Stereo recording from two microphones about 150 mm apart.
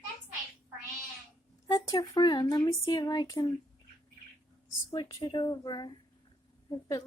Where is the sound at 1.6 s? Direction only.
25° left (ahead or behind).